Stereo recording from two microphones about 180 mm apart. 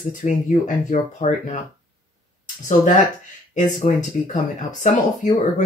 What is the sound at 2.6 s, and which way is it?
Speech, 45° left (ahead or behind).